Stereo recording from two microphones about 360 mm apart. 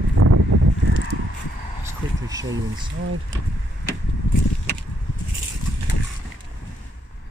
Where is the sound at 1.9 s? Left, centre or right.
Centre.